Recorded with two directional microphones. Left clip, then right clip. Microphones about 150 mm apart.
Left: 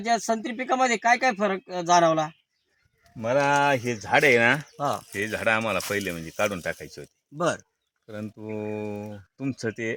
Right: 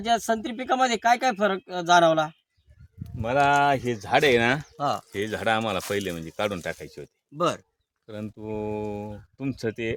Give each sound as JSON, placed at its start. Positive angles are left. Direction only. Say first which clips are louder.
{"t": 0.0, "sound": "speech", "louder": "right 1 dB", "side_deg": -10}
{"t": 3.0, "sound": "livestock", "louder": "left 2 dB", "side_deg": -45}
{"t": 3.3, "sound": "speech", "louder": "right 1 dB", "side_deg": -30}
{"t": 4.8, "sound": "speech", "louder": "right 1 dB", "side_deg": 5}
{"t": 5.1, "sound": "speech", "louder": "left 1 dB", "side_deg": -65}
{"t": 5.9, "sound": "speech", "louder": "even", "side_deg": -45}